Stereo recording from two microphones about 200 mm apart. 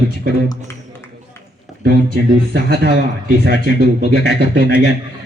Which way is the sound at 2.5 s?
50° right (ahead or behind).